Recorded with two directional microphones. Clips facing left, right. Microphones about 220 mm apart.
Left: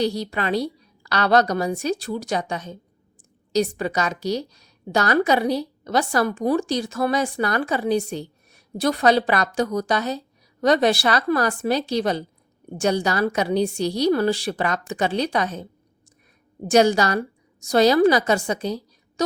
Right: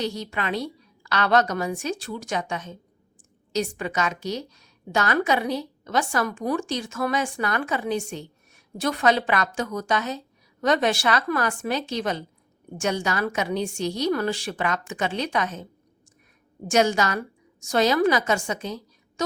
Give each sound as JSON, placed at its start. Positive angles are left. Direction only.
{"t": 0.0, "sound": "a woman's voice", "side_deg": 35}
{"t": 16.6, "sound": "a woman's voice", "side_deg": 35}